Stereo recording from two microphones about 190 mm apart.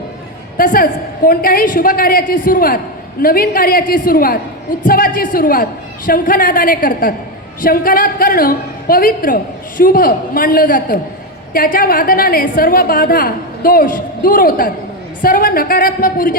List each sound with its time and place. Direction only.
0.5 s a woman's voice: 50° left (ahead or behind)